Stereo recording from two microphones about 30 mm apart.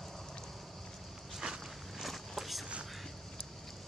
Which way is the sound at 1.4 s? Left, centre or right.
Right.